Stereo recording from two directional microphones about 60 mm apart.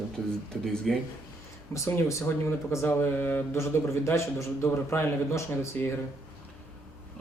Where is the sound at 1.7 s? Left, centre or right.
Left.